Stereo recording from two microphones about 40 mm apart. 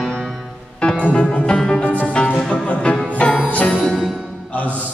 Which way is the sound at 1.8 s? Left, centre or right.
Left.